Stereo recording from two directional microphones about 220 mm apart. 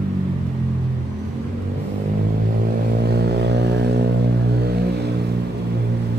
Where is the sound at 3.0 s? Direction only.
45° right (ahead or behind).